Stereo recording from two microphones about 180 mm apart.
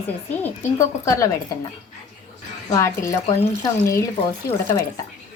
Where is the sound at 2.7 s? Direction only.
15° left (ahead or behind).